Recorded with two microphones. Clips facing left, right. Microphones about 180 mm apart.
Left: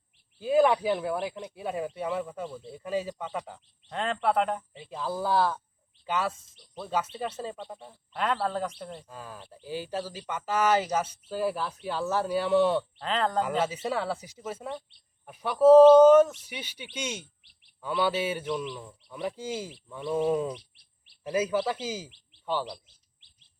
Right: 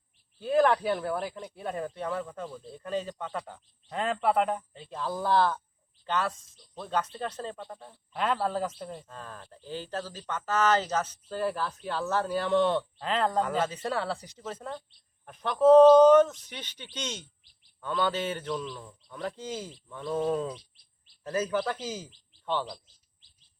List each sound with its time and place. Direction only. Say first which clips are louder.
0.3 s speech: left 1 dB; 10° left (ahead or behind)
3.8 s speech: even; 5° right (ahead or behind)
9.0 s speech: left 1 dB; 10° left (ahead or behind)
20.7 s bird vocalization: left 2 dB; 70° left (ahead or behind)
21.2 s speech: left 2 dB; 10° left (ahead or behind)